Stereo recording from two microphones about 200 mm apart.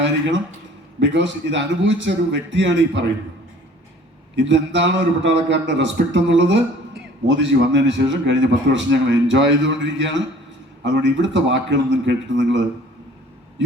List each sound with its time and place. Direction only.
0.9 s a man's voice: 65° right (ahead or behind)
4.4 s a man's voice: 65° right (ahead or behind)